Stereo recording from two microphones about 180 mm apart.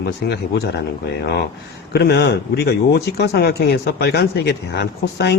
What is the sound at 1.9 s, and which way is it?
Speech, 70° left (ahead or behind).